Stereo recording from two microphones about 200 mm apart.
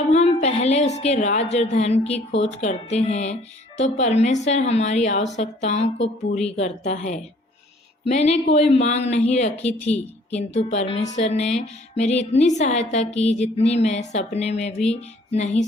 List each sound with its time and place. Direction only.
0.1 s a woman's voice: 35° left (ahead or behind)
9.6 s speech: 5° left (ahead or behind)
10.6 s speech: 35° left (ahead or behind)